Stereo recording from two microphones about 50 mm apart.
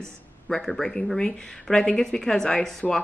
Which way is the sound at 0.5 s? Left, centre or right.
Centre.